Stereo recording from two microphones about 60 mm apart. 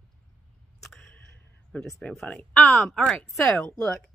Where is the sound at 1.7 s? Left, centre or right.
Left.